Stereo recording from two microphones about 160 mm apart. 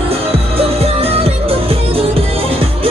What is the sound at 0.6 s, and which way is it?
Music, 40° right (ahead or behind).